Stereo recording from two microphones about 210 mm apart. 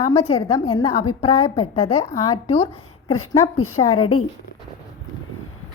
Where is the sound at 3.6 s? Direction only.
90° left.